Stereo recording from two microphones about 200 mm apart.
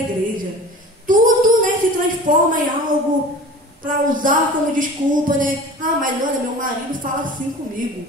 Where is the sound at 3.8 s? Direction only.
40° right (ahead or behind).